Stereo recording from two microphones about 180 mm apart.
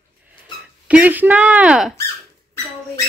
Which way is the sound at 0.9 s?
10° right (ahead or behind).